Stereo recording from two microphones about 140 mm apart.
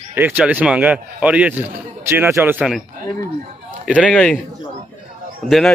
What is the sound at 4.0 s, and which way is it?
Speech, 10° left (ahead or behind).